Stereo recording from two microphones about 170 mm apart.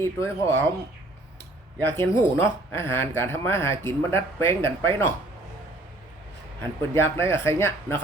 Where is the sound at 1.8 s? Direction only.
15° left (ahead or behind).